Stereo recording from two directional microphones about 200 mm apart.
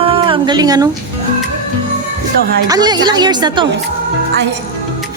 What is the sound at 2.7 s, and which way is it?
Speech, 20° right (ahead or behind).